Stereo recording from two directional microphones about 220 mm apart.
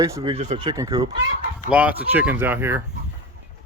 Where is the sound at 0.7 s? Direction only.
15° right (ahead or behind).